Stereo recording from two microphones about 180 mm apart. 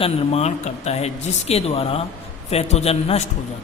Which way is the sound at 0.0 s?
35° left (ahead or behind).